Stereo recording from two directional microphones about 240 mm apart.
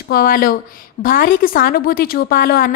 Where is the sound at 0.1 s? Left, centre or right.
Left.